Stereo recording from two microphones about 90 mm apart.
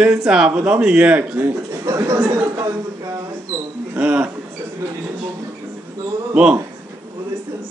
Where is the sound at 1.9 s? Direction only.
40° right (ahead or behind).